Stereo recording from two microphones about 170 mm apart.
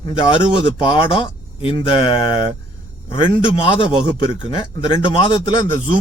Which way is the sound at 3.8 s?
30° left (ahead or behind).